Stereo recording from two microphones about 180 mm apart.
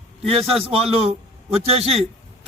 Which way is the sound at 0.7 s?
30° right (ahead or behind).